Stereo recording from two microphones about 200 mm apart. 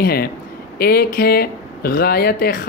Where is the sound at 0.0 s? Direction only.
50° left (ahead or behind).